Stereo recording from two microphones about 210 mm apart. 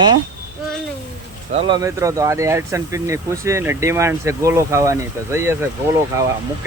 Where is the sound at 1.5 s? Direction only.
20° right (ahead or behind).